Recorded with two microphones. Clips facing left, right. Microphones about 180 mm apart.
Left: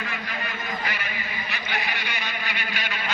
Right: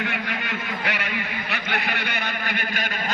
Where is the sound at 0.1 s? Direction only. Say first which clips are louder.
Right 4 dB; 70° right (ahead or behind).